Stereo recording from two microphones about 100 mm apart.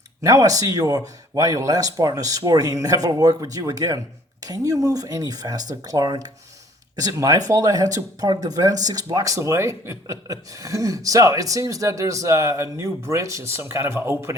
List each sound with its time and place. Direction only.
0.2 s speech: 35° right (ahead or behind)